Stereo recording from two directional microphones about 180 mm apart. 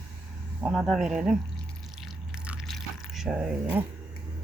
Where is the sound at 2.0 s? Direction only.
5° right (ahead or behind).